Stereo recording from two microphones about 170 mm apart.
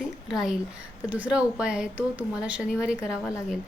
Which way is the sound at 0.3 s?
5° right (ahead or behind).